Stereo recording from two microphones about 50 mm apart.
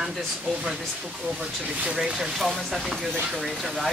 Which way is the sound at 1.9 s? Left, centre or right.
Centre.